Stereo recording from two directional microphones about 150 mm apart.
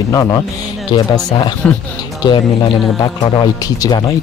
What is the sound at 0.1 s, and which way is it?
Speech, 25° left (ahead or behind).